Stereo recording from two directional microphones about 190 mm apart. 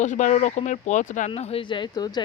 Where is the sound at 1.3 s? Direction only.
30° left (ahead or behind).